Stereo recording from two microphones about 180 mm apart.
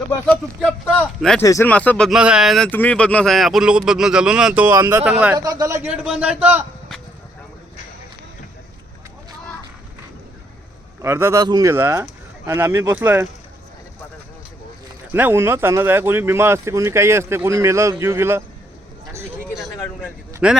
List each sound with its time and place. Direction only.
0.9 s speech: centre (ahead or behind)
1.4 s speech: 15° left (ahead or behind); by 2.6 s centre (ahead or behind)
2.6 s speech: 10° left (ahead or behind); by 5.4 s 5° right (ahead or behind)
5.4 s speech: 20° right (ahead or behind); by 7.0 s 5° right (ahead or behind)
11.0 s speech: 15° right (ahead or behind)
15.1 s speech: 10° right (ahead or behind)
19.7 s a sound: 15° left (ahead or behind)
20.4 s speech: 5° right (ahead or behind)